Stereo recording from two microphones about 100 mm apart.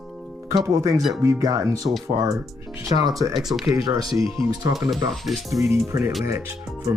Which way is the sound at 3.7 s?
40° right (ahead or behind).